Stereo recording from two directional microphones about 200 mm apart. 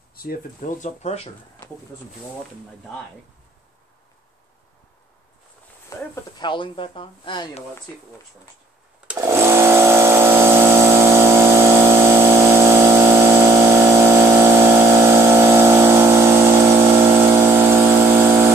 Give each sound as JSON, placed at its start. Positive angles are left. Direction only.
{"t": 0.1, "sound": "speech", "side_deg": 45}
{"t": 5.9, "sound": "speech", "side_deg": 20}
{"t": 9.0, "sound": "a sound", "side_deg": -15}
{"t": 17.3, "sound": "chainsaw", "side_deg": -10}